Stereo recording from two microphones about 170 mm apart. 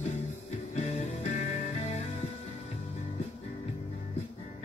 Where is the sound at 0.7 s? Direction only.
45° left (ahead or behind).